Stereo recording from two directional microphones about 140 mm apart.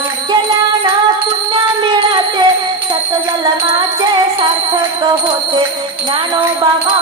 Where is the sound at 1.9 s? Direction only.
30° right (ahead or behind).